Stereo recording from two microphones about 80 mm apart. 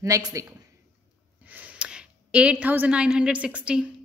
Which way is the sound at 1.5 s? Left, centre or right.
Centre.